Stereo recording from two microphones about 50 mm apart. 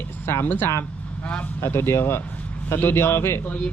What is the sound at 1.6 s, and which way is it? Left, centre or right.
Speech, left.